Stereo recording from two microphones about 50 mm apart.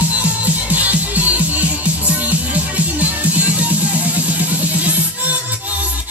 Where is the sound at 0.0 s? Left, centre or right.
Right.